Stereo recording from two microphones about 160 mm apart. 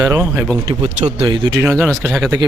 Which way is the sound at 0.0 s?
15° right (ahead or behind).